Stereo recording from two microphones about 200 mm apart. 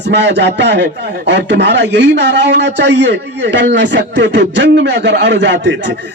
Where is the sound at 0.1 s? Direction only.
60° right (ahead or behind).